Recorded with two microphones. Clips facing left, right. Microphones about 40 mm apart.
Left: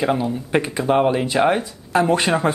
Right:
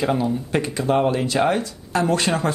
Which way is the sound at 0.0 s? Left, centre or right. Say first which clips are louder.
Left 1 dB; centre.